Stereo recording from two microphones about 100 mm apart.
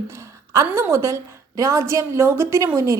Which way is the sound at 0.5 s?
25° right (ahead or behind).